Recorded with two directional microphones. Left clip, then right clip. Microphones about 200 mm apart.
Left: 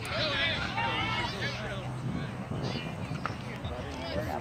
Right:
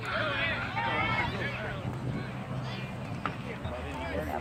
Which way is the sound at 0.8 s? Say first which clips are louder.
Right 3 dB; 60° left (ahead or behind).